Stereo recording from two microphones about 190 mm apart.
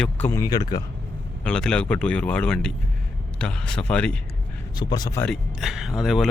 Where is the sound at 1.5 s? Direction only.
5° left (ahead or behind).